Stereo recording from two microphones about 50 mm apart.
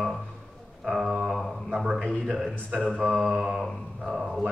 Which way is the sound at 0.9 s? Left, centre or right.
Centre.